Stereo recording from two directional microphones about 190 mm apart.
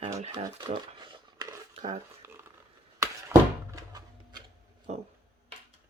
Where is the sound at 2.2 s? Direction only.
15° right (ahead or behind).